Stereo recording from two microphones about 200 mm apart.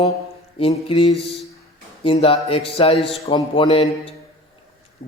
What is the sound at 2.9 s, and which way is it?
Speech, centre (ahead or behind).